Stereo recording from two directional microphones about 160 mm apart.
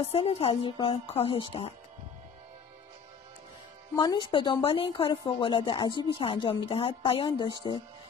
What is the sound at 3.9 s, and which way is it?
A woman's voice, 30° left (ahead or behind).